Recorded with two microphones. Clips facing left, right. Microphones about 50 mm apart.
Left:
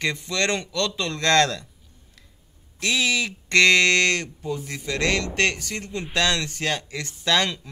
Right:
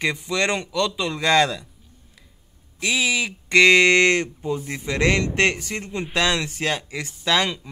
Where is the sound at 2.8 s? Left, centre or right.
Centre.